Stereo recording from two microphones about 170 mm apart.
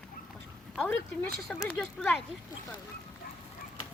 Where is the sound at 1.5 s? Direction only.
Centre (ahead or behind).